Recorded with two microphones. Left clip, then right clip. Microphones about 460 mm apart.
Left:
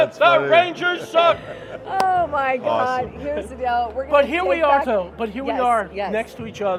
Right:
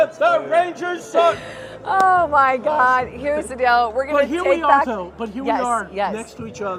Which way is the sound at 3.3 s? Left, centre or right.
Right.